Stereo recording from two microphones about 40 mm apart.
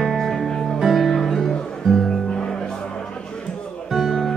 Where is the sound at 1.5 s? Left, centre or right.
Centre.